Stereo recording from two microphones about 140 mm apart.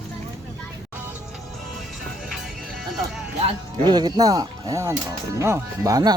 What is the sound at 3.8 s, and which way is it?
Speech, 30° right (ahead or behind).